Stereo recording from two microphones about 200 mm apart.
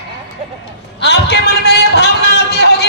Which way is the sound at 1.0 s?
55° left (ahead or behind).